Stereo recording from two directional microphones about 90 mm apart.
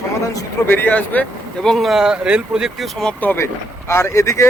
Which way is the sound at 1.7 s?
Centre (ahead or behind).